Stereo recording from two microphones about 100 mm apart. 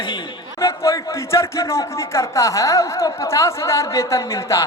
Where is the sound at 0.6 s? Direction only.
30° left (ahead or behind).